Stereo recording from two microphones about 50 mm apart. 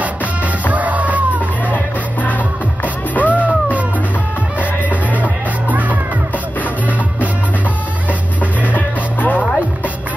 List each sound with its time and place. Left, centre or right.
0.7 s music: right
2.2 s music: left
5.1 s music: right
8.7 s music: left